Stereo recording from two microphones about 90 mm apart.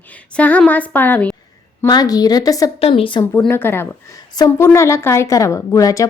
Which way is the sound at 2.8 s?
80° left.